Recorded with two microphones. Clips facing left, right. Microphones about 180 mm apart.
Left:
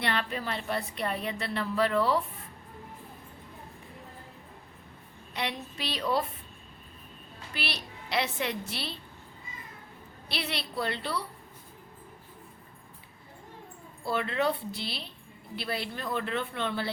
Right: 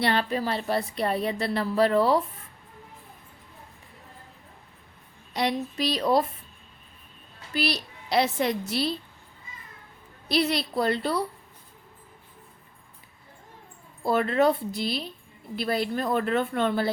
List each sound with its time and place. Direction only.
0.0 s speech: 35° right (ahead or behind)
5.3 s speech: 35° right (ahead or behind)
7.5 s speech: 40° right (ahead or behind)
10.2 s speech: 40° right (ahead or behind)
14.0 s a woman's voice: 45° right (ahead or behind)